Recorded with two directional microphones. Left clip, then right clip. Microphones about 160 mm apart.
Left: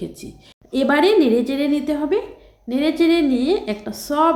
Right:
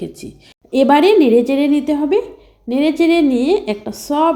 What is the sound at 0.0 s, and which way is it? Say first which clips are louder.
A woman's voice: right 3 dB; 15° right (ahead or behind).